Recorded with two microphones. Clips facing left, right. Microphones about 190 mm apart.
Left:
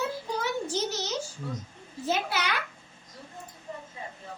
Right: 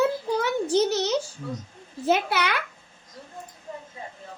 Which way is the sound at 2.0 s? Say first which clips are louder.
Right 6 dB; 65° right (ahead or behind).